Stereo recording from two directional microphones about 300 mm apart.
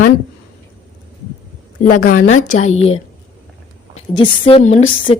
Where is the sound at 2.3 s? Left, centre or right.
Left.